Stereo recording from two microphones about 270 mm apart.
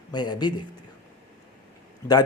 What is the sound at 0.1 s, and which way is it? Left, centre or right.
Speech, centre.